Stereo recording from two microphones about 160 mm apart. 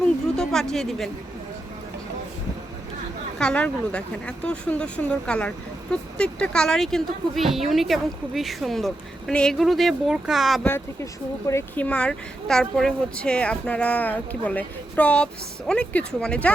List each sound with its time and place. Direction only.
0.0 s speech: 5° left (ahead or behind)
3.3 s speech: 5° left (ahead or behind)
10.7 s speech: 15° left (ahead or behind)
11.8 s speech: 5° left (ahead or behind)